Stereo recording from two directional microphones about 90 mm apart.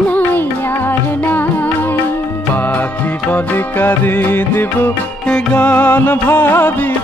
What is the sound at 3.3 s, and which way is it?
Music, 25° left (ahead or behind).